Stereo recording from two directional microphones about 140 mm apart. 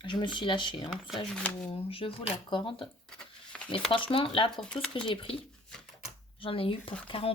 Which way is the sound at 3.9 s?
40° left (ahead or behind).